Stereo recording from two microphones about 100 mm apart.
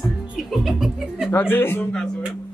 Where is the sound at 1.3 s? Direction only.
20° left (ahead or behind).